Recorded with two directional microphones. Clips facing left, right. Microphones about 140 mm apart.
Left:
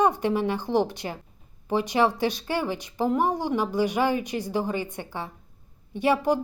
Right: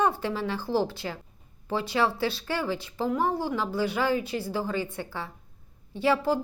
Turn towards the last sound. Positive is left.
turn(degrees=15)  # may be behind; listen again after turning